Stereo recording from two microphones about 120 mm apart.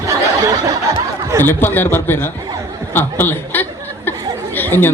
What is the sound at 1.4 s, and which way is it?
Speech, 15° left (ahead or behind).